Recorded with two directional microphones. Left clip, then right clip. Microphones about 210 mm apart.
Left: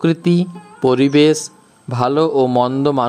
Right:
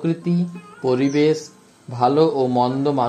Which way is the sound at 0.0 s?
35° left (ahead or behind).